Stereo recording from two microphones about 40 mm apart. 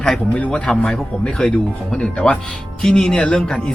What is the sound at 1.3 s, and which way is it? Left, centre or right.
Speech, left.